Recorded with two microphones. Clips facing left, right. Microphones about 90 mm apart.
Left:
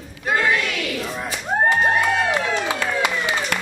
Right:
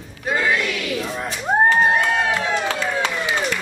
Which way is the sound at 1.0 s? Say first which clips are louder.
Right 1 dB; centre (ahead or behind).